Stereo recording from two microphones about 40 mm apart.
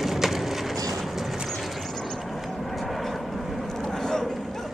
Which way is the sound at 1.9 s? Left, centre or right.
Centre.